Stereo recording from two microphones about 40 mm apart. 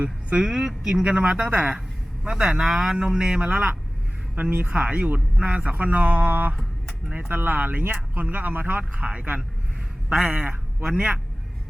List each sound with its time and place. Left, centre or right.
0.3 s a woman's voice: centre
1.0 s speech: right
2.2 s speech: centre
4.4 s speech: right
4.7 s speech: right
8.8 s speech: right
10.4 s a man's voice: right
10.8 s speech: right